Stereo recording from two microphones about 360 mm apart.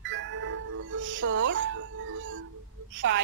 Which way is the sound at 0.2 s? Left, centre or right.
Right.